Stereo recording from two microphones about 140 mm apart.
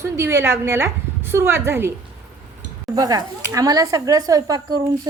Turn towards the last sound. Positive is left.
turn(degrees=-25)  # may be behind; listen again after turning